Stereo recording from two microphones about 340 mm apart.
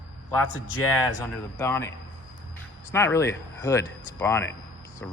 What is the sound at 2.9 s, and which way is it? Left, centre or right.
Speech, centre.